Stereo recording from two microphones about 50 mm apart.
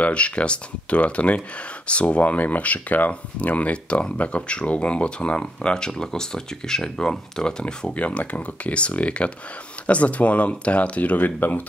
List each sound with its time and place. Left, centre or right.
0.0 s speech: left
7.6 s speech: left